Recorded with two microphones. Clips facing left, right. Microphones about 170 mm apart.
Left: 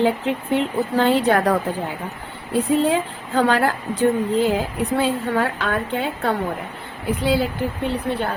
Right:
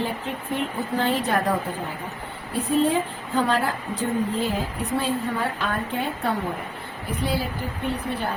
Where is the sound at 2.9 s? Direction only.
90° left; by 6.3 s 75° left (ahead or behind).